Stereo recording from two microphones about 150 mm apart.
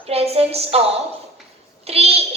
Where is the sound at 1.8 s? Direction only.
40° right (ahead or behind).